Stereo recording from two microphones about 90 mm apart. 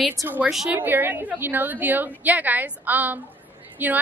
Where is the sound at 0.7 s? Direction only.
20° right (ahead or behind).